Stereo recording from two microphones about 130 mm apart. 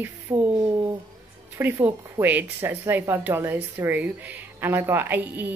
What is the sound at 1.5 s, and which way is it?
Speech, 15° right (ahead or behind).